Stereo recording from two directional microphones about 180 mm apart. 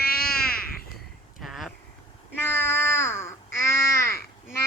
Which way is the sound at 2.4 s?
15° left (ahead or behind).